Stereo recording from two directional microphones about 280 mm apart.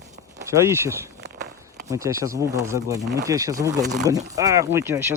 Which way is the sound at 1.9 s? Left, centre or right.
Centre.